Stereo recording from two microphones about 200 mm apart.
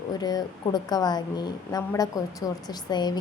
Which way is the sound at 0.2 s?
20° left (ahead or behind).